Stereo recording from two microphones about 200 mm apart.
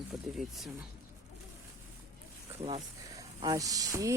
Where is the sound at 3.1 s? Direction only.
20° right (ahead or behind).